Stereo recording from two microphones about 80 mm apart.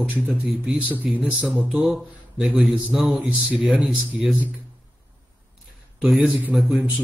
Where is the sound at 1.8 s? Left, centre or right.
Centre.